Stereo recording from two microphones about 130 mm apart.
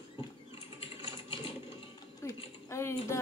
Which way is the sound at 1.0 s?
40° left (ahead or behind).